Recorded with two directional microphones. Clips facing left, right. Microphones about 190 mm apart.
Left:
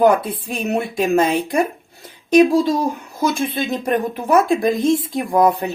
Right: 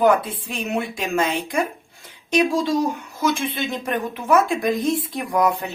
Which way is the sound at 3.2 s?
35° left (ahead or behind).